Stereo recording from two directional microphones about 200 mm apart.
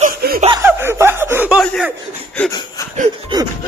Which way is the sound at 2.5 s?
20° left (ahead or behind).